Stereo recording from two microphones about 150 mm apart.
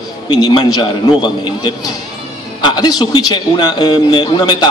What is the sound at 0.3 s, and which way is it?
A man's voice, 30° left (ahead or behind).